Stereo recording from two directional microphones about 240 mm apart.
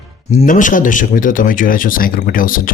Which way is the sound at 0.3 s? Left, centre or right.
Left.